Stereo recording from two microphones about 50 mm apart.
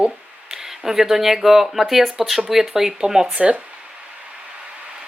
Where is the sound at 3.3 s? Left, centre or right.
Right.